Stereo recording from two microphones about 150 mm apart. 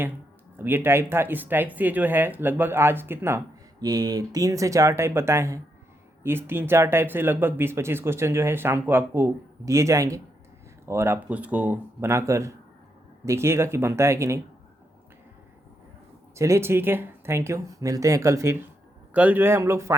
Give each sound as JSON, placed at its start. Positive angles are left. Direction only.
{"t": 0.6, "sound": "speech", "side_deg": -15}
{"t": 16.3, "sound": "speech", "side_deg": -20}